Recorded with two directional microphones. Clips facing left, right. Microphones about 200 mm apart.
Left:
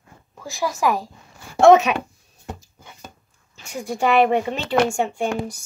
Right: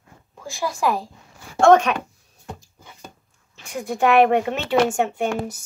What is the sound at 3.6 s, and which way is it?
A woman's voice, centre (ahead or behind).